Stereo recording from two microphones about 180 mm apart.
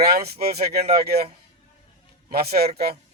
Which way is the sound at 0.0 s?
60° right (ahead or behind).